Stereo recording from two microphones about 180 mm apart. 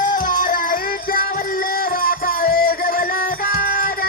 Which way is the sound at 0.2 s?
50° left (ahead or behind).